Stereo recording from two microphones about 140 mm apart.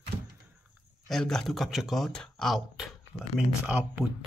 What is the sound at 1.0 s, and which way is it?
Speech, 5° left (ahead or behind).